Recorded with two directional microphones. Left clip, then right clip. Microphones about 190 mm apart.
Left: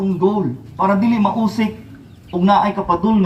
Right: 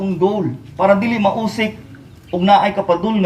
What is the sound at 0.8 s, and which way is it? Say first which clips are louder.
Speech: right 3 dB; 35° right (ahead or behind).